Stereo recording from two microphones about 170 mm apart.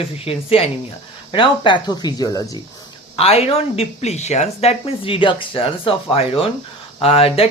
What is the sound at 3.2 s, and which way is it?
Speech, 35° left (ahead or behind).